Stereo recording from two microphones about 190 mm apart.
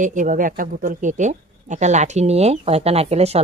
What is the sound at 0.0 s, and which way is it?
Speech, 45° right (ahead or behind).